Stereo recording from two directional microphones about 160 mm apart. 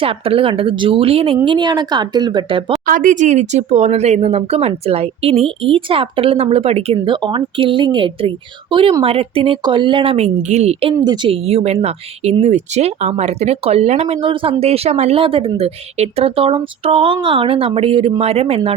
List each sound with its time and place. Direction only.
0.0 s speech: 35° right (ahead or behind)
2.8 s speech: 55° right (ahead or behind); by 10.9 s 40° right (ahead or behind)
10.9 s speech: 25° right (ahead or behind)